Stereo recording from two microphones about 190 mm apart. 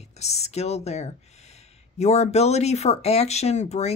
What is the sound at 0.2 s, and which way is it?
Speech, 35° left (ahead or behind).